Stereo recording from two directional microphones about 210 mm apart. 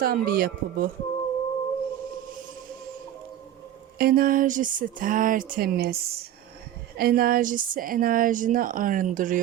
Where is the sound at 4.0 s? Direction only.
45° right (ahead or behind).